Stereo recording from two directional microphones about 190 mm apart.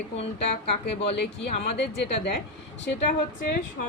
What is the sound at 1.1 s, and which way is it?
Speech, 65° left (ahead or behind).